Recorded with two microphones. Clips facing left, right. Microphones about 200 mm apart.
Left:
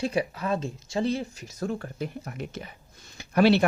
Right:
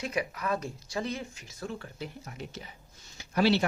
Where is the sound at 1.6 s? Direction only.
50° left (ahead or behind).